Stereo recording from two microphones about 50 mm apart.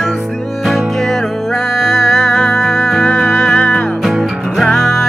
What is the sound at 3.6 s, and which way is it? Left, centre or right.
Music, left.